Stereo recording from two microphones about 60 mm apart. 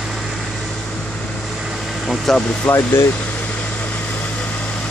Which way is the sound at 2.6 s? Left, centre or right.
Left.